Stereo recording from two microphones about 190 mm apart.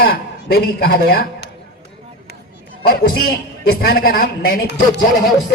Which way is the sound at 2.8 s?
50° left (ahead or behind).